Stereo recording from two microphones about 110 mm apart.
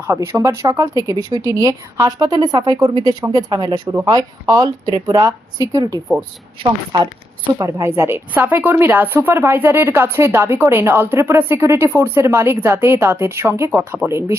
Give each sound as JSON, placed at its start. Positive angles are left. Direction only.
{"t": 0.0, "sound": "speech", "side_deg": -25}
{"t": 7.6, "sound": "speech", "side_deg": -25}